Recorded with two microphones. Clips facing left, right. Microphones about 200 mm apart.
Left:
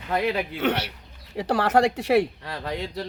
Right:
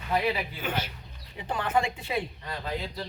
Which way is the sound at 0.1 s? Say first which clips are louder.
Left 3 dB; 75° left (ahead or behind).